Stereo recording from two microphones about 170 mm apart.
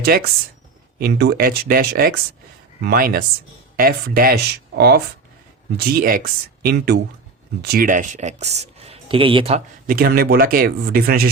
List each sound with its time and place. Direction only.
0.0 s speech: 65° right (ahead or behind); by 9.6 s 30° right (ahead or behind)
9.8 s speech: 55° right (ahead or behind)